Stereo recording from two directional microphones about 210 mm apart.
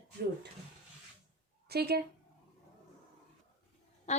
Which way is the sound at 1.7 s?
50° right (ahead or behind).